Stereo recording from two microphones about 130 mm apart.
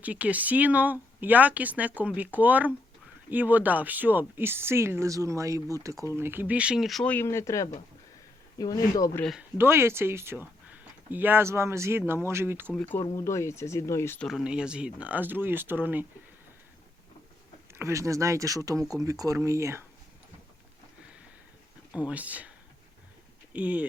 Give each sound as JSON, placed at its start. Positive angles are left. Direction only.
{"t": 0.0, "sound": "speech", "side_deg": -10}
{"t": 7.1, "sound": "speech", "side_deg": 20}
{"t": 9.4, "sound": "speech", "side_deg": -20}
{"t": 12.7, "sound": "speech", "side_deg": 15}
{"t": 14.2, "sound": "speech", "side_deg": 0}
{"t": 17.7, "sound": "speech", "side_deg": -20}
{"t": 21.9, "sound": "speech", "side_deg": -10}